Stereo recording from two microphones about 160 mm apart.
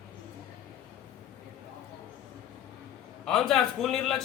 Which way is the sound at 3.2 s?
5° left (ahead or behind).